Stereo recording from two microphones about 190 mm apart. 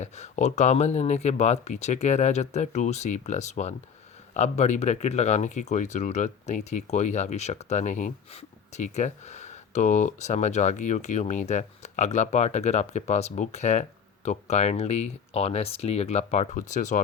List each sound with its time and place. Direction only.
0.0 s speech: 35° left (ahead or behind)